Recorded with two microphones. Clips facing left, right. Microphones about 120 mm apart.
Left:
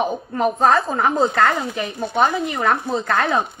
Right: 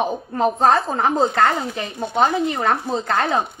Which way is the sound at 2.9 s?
35° right (ahead or behind).